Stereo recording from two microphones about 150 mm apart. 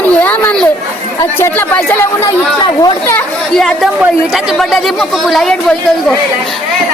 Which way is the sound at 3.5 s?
5° left (ahead or behind).